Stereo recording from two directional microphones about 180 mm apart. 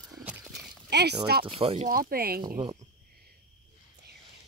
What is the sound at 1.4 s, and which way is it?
Speech, 30° right (ahead or behind).